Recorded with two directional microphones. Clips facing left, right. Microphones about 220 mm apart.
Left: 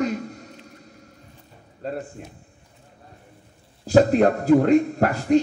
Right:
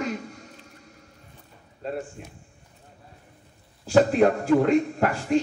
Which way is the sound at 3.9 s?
40° left (ahead or behind).